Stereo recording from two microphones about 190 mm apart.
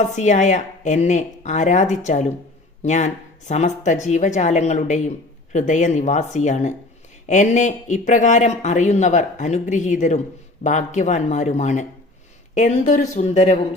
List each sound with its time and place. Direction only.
0.0 s a woman's voice: 40° left (ahead or behind)